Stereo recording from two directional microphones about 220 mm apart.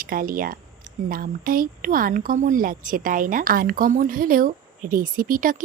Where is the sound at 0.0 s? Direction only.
40° right (ahead or behind).